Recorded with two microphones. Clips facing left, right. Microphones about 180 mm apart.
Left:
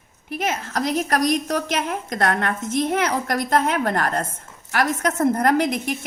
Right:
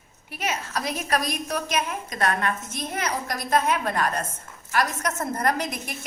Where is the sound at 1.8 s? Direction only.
65° left (ahead or behind).